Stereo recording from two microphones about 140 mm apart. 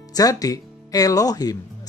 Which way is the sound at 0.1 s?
25° left (ahead or behind).